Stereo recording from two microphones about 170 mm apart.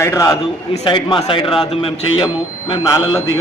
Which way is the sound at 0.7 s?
30° left (ahead or behind).